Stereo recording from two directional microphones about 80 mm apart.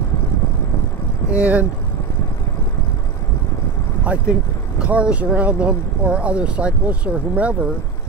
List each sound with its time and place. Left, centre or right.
1.3 s speech: centre
4.0 s speech: centre